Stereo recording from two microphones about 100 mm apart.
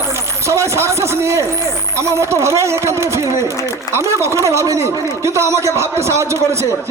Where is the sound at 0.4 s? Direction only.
30° right (ahead or behind).